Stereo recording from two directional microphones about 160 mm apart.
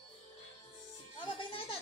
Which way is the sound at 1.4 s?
35° left (ahead or behind).